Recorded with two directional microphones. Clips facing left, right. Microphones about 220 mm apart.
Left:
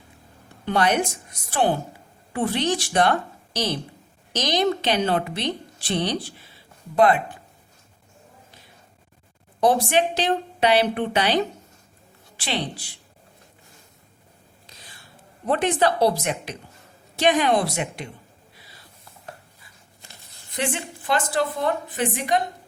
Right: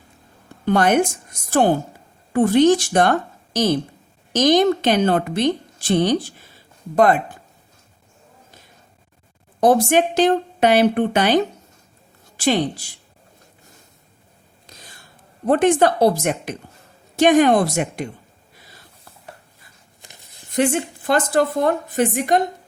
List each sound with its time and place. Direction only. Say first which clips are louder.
0.6 s a woman's voice: right 5 dB; 45° right (ahead or behind)
9.6 s a woman's voice: right 4 dB; 45° right (ahead or behind)
15.4 s a woman's voice: right 6 dB; 50° right (ahead or behind)
20.6 s a woman's voice: right 9 dB; 45° right (ahead or behind)